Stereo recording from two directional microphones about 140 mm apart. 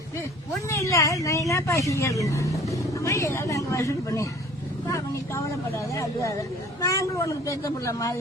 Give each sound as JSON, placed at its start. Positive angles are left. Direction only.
{"t": 0.7, "sound": "speech", "side_deg": 20}